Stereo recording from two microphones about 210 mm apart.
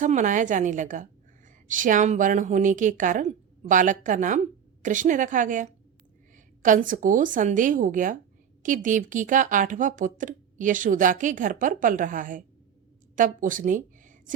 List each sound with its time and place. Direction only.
0.0 s speech: 35° right (ahead or behind)